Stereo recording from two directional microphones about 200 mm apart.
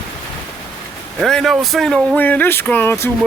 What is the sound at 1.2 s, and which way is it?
Speech, centre (ahead or behind).